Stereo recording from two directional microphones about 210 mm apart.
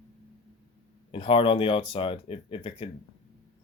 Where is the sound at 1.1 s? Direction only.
25° left (ahead or behind).